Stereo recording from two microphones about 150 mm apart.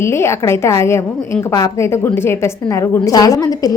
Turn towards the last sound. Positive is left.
turn(degrees=25)  # may be behind; listen again after turning